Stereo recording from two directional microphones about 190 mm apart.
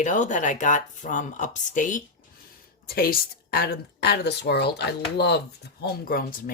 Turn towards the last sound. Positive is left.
turn(degrees=50)  # may be behind; listen again after turning